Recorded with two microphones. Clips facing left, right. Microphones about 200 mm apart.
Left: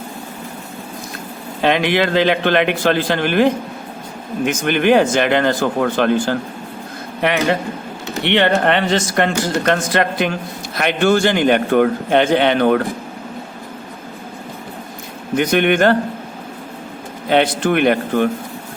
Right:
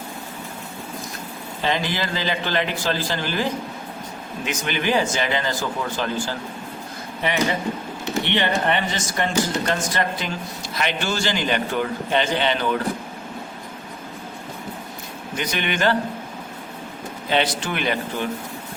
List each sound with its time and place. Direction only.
1.6 s a man's voice: 65° left (ahead or behind)
8.2 s a man's voice: 65° left (ahead or behind)
15.4 s a man's voice: 55° left (ahead or behind)
17.2 s a man's voice: 55° left (ahead or behind)